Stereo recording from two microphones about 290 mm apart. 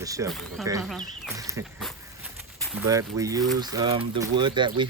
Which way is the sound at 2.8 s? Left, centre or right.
Centre.